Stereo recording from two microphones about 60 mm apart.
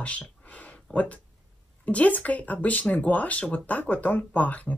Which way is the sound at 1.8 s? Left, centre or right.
Left.